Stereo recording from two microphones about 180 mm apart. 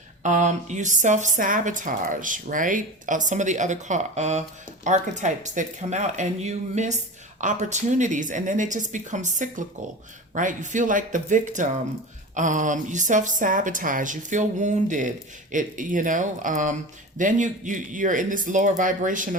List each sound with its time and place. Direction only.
0.2 s speech: 40° right (ahead or behind)